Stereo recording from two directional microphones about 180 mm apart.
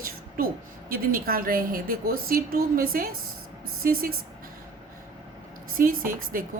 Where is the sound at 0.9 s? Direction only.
55° right (ahead or behind).